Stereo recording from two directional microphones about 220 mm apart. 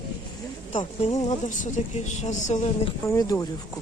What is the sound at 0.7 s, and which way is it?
A woman's voice, 25° left (ahead or behind).